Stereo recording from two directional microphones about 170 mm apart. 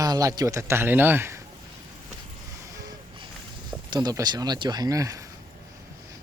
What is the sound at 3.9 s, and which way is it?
Speech, 20° right (ahead or behind).